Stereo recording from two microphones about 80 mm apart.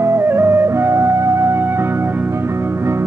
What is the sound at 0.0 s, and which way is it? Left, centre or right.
Music, right.